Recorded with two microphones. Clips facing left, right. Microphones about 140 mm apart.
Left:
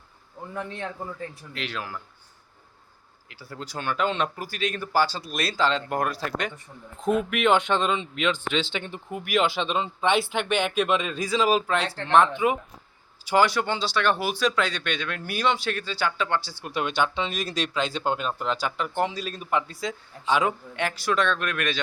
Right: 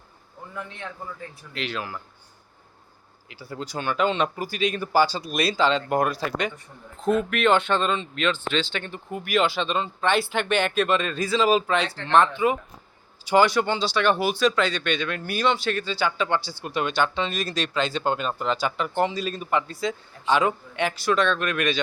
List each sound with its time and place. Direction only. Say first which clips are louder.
0.5 s a man's voice: left 4 dB; 35° left (ahead or behind)
1.5 s speech: right 3 dB; centre (ahead or behind)
3.2 s speech: right 4 dB; centre (ahead or behind)
13.3 s speech: right 2 dB; 5° left (ahead or behind)